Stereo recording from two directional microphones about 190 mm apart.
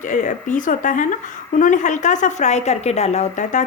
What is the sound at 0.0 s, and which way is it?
Speech, 40° left (ahead or behind).